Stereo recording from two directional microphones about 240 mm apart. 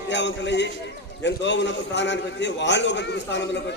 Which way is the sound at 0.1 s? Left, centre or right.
Left.